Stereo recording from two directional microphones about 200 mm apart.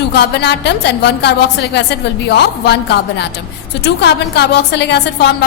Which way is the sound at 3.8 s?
55° left (ahead or behind).